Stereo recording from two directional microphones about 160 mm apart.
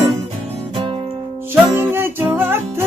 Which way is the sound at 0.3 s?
40° right (ahead or behind).